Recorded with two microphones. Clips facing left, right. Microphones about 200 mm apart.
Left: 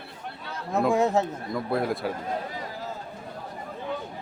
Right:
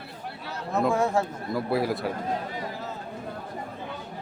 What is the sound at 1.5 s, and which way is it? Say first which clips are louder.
Speech: right 1 dB; 5° right (ahead or behind).